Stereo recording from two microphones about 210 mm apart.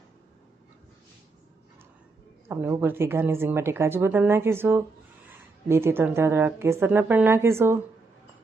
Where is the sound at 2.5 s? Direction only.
10° right (ahead or behind).